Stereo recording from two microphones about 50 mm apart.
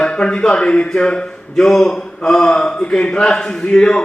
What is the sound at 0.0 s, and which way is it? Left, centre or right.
A man's voice, left.